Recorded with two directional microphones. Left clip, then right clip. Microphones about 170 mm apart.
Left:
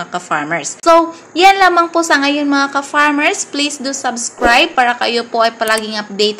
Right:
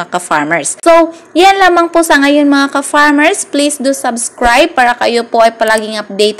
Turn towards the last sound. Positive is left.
turn(degrees=-40)  # may be behind; listen again after turning